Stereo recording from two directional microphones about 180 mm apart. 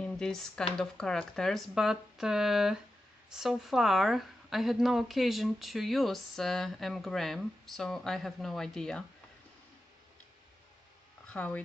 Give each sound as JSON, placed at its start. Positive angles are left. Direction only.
{"t": 0.0, "sound": "speech", "side_deg": 5}
{"t": 11.2, "sound": "speech", "side_deg": 10}